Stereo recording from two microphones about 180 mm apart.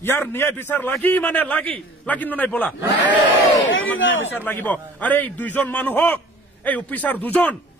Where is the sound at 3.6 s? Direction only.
90° left.